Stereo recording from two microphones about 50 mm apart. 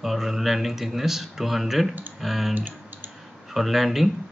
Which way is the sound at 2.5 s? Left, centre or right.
Right.